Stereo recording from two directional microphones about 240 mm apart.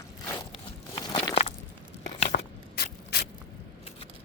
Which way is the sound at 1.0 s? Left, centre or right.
Centre.